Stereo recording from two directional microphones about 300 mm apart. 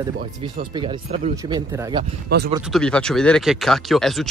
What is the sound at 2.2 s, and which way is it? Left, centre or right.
Speech, right.